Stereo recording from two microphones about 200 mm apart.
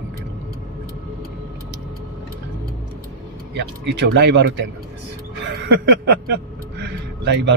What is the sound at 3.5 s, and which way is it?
Speech, 60° right (ahead or behind).